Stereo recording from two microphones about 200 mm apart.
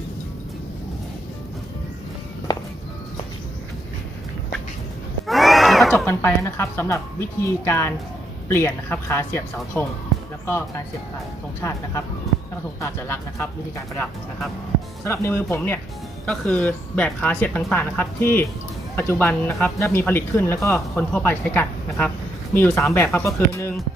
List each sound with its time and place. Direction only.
2.5 s music: 20° left (ahead or behind)
5.2 s a sound: centre (ahead or behind)
6.1 s speech: 10° left (ahead or behind)
12.8 s speech: 15° left (ahead or behind)
15.0 s speech: 15° left (ahead or behind)